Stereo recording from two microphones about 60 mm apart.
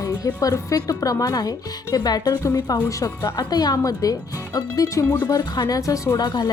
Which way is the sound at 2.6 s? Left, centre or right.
Left.